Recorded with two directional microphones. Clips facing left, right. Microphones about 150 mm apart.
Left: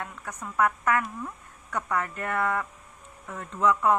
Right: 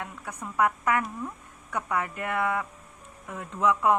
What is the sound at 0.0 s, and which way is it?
Speech, 15° right (ahead or behind).